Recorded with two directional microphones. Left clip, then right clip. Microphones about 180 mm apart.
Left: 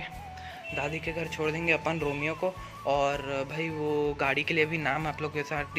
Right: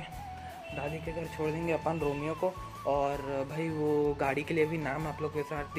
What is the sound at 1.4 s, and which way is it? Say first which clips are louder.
Speech: left 4 dB; centre (ahead or behind).